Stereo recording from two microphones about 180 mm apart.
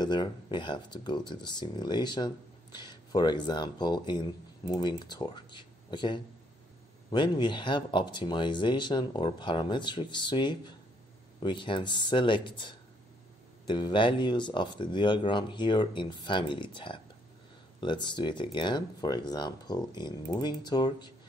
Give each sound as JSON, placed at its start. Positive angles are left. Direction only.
{"t": 0.0, "sound": "speech", "side_deg": 25}